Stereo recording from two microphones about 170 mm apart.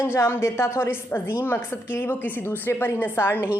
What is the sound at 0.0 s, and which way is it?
A woman's voice, 15° left (ahead or behind).